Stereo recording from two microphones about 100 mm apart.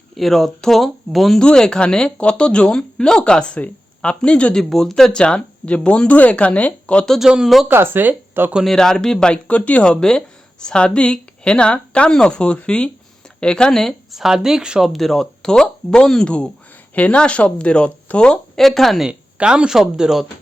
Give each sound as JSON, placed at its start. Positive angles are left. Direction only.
{"t": 0.2, "sound": "speech", "side_deg": 0}
{"t": 7.7, "sound": "speech", "side_deg": -20}
{"t": 8.5, "sound": "speech", "side_deg": 5}